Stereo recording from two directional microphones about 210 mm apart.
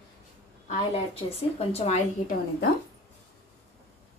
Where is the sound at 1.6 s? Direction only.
30° left (ahead or behind).